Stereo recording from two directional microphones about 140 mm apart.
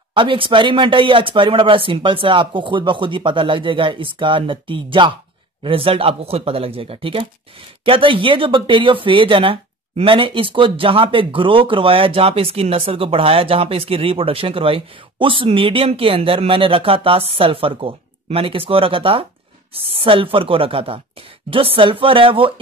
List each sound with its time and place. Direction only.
0.1 s speech: 35° right (ahead or behind)